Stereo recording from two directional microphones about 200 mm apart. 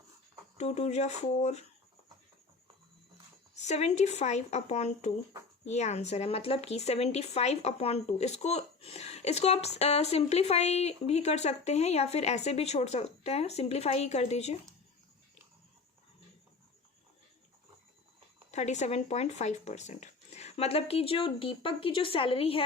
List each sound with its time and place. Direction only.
0.5 s speech: 35° left (ahead or behind)
3.6 s speech: 35° left (ahead or behind)
18.5 s speech: 35° left (ahead or behind)